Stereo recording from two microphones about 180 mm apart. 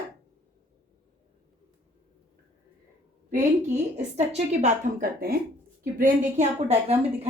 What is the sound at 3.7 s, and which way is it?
A woman's voice, 40° right (ahead or behind).